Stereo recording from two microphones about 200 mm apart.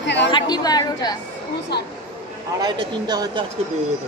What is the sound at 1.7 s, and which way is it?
Speech, 55° left (ahead or behind).